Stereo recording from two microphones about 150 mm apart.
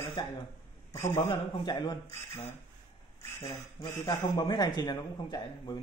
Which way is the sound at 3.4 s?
30° left (ahead or behind).